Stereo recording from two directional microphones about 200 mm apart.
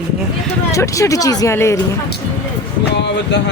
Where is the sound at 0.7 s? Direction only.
15° left (ahead or behind).